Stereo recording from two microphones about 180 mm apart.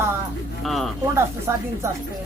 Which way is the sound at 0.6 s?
Centre (ahead or behind).